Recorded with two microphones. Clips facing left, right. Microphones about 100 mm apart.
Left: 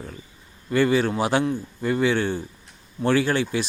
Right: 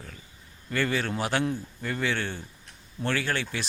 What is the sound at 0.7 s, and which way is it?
A man's voice, 15° left (ahead or behind).